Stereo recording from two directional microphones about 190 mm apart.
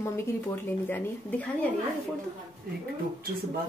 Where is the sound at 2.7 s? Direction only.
50° right (ahead or behind).